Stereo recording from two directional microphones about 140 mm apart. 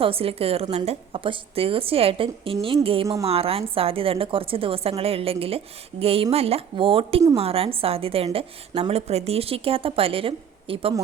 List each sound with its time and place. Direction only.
0.0 s a woman's voice: 45° right (ahead or behind)